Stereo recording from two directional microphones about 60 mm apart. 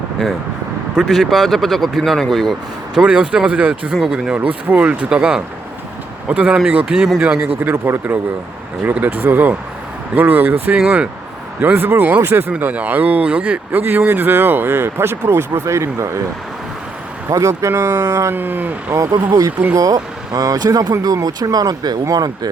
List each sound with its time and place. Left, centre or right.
0.9 s speech: centre
2.9 s speech: centre
3.9 s speech: centre
4.4 s speech: right
6.9 s speech: centre
7.2 s speech: centre
7.6 s speech: right
13.7 s speech: right
17.2 s speech: right
18.3 s speech: right
19.7 s speech: right